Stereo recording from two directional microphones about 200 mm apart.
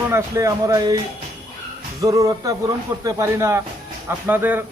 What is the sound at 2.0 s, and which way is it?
Speech, 15° right (ahead or behind).